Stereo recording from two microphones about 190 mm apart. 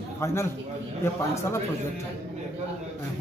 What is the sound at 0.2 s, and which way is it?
Speech, 15° left (ahead or behind).